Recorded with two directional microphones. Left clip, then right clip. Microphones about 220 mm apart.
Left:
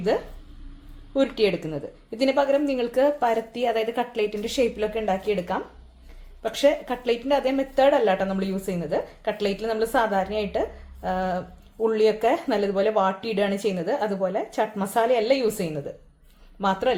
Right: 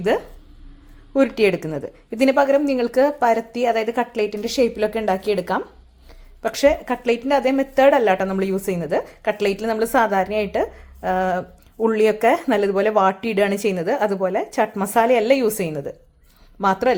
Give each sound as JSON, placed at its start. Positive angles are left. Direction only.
{"t": 1.1, "sound": "speech", "side_deg": -30}